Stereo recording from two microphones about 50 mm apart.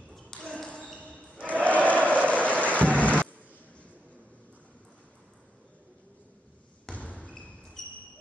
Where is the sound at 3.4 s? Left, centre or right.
Left.